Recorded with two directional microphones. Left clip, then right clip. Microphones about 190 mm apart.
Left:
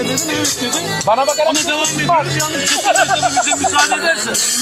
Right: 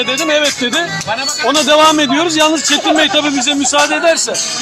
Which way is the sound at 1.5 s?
15° right (ahead or behind).